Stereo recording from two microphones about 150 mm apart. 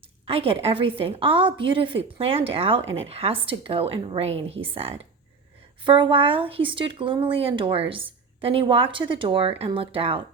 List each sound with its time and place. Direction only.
0.3 s a woman's voice: 40° right (ahead or behind)